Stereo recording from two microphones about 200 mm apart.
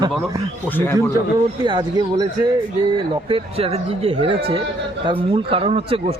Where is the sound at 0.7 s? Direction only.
10° left (ahead or behind).